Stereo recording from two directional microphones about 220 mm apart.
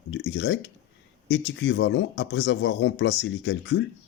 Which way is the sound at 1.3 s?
55° left (ahead or behind).